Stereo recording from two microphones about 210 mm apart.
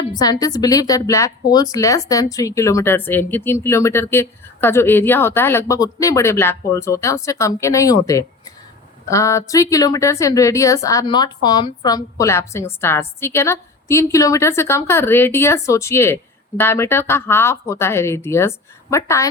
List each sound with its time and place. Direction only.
0.1 s a woman's voice: 20° left (ahead or behind)